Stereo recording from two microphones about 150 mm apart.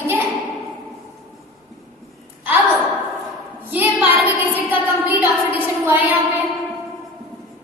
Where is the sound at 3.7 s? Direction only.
10° right (ahead or behind).